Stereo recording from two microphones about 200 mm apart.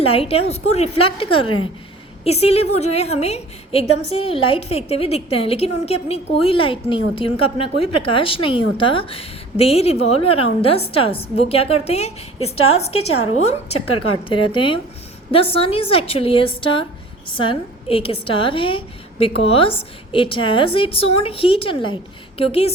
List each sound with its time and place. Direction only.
0.0 s a woman's voice: 30° left (ahead or behind)
13.7 s a woman's voice: 90° left
14.3 s a woman's voice: 25° left (ahead or behind)